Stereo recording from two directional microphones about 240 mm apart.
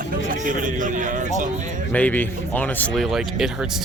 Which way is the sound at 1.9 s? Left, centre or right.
Centre.